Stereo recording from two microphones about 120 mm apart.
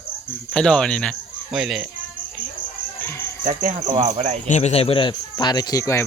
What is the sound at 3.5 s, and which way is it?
Speech, 90° right.